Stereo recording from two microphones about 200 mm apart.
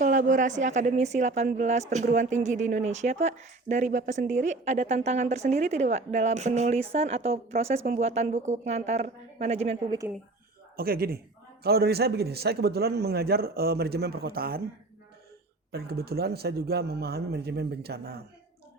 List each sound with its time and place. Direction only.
0.0 s speech: 40° right (ahead or behind)
10.8 s a man's voice: 50° right (ahead or behind)
15.7 s a man's voice: 50° right (ahead or behind)